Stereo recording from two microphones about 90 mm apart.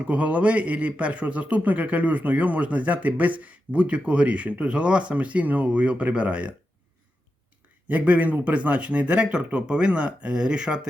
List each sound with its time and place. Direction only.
0.1 s a man's voice: 15° right (ahead or behind)
7.9 s a man's voice: 15° right (ahead or behind)